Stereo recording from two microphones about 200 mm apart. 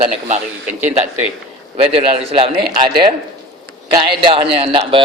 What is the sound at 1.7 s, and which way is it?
Speech, 30° right (ahead or behind).